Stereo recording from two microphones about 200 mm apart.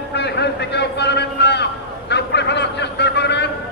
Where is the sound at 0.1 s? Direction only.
55° left (ahead or behind).